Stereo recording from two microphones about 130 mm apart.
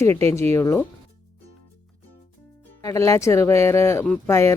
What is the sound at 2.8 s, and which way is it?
Speech, 25° left (ahead or behind).